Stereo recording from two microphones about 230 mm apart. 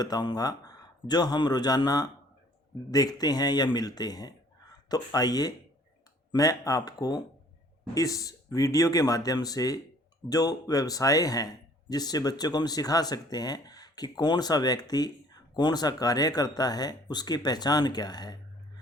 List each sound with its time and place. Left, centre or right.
0.0 s a man's voice: centre